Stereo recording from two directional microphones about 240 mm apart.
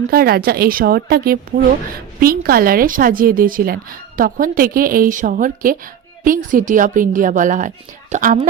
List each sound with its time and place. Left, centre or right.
0.1 s a woman's voice: right